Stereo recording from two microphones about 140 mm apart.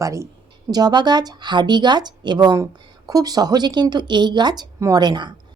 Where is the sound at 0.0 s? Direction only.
20° right (ahead or behind).